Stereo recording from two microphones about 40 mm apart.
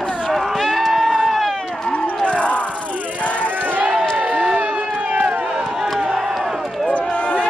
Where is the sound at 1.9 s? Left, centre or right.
Left.